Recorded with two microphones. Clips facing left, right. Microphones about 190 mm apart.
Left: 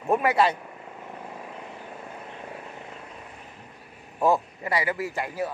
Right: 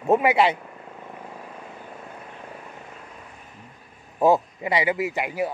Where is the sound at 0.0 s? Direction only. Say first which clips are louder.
Right 4 dB; 25° right (ahead or behind).